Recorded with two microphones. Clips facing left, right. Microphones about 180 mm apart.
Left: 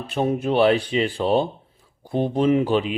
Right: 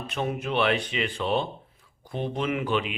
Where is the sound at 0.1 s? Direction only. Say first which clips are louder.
Left 8 dB; 35° left (ahead or behind).